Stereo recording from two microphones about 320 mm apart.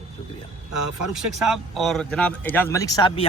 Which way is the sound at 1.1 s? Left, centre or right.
Centre.